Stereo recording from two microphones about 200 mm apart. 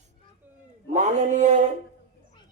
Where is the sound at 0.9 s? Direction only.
35° right (ahead or behind).